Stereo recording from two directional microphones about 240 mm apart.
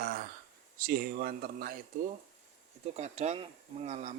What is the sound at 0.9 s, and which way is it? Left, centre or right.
Speech, right.